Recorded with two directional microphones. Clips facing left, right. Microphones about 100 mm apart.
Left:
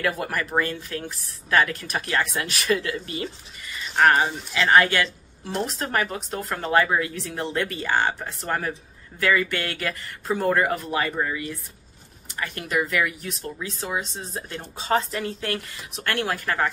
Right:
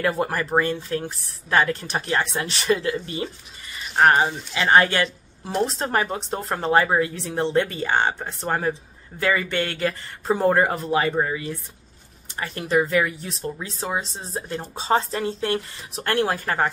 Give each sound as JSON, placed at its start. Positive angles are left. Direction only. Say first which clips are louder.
{"t": 0.0, "sound": "speech", "louder": "right 3 dB", "side_deg": -30}